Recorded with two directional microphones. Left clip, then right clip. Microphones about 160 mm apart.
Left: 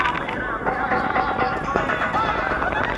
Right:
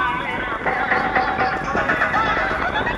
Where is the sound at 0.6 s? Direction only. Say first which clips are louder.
Right 2 dB; 50° right (ahead or behind).